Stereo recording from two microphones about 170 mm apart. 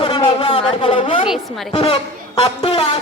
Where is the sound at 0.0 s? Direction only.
35° left (ahead or behind).